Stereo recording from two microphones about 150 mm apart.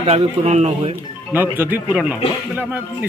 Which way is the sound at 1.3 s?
15° right (ahead or behind).